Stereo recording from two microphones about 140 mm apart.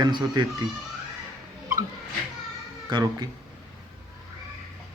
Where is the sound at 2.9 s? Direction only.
30° right (ahead or behind).